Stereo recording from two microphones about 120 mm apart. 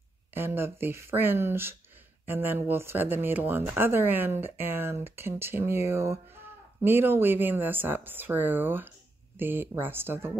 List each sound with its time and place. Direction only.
0.3 s speech: 20° right (ahead or behind)